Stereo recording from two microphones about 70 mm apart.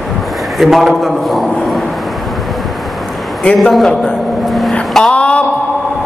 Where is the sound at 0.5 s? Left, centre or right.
Centre.